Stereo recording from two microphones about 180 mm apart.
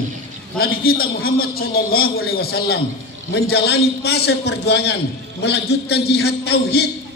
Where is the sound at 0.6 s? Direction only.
55° left (ahead or behind).